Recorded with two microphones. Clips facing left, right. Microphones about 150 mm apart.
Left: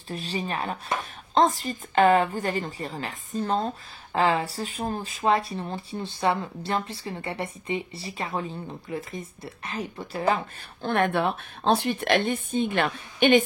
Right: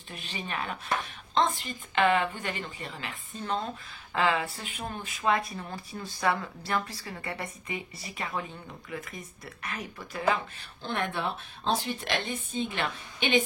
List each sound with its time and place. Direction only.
0.1 s a woman's voice: 35° left (ahead or behind)
10.8 s speech: 55° left (ahead or behind)